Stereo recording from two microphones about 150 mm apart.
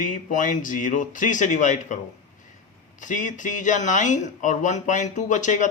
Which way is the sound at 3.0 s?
55° left (ahead or behind).